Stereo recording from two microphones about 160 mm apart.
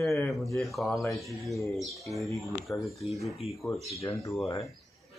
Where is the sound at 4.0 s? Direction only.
20° left (ahead or behind).